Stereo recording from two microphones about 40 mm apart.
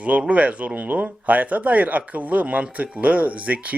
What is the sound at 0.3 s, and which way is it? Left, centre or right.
A man's voice, right.